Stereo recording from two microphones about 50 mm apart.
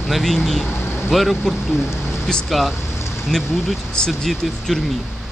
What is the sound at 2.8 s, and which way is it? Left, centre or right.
Rain on surface, left.